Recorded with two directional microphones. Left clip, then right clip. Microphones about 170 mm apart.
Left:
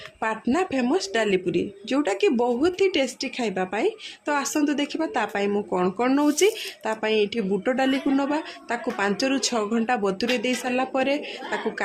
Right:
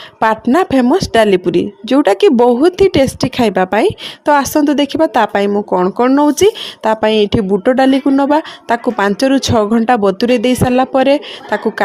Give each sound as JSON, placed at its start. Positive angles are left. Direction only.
{"t": 0.4, "sound": "speech", "side_deg": -45}
{"t": 5.5, "sound": "speech", "side_deg": -35}